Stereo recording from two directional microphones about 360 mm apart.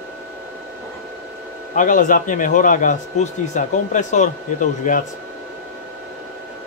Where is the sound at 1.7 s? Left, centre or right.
Left.